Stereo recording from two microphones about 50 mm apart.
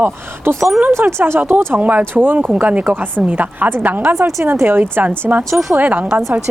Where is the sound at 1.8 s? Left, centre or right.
Right.